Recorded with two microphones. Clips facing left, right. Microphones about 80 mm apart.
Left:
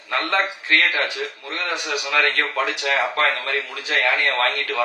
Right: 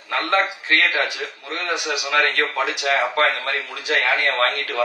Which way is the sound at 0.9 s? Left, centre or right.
Centre.